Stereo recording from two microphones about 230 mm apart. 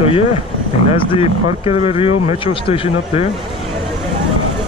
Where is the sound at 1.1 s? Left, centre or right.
Left.